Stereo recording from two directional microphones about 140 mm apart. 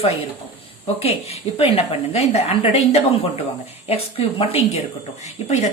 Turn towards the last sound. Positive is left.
turn(degrees=55)  # may be behind; listen again after turning